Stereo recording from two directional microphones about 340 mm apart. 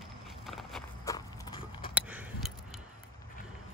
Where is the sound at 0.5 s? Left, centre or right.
Centre.